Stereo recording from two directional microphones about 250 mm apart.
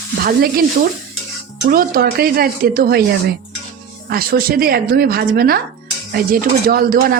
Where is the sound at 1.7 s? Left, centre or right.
Right.